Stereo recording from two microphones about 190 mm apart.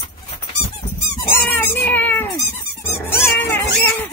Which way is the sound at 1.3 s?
10° left (ahead or behind).